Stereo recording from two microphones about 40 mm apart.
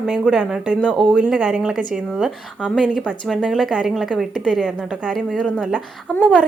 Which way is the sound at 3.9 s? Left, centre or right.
Centre.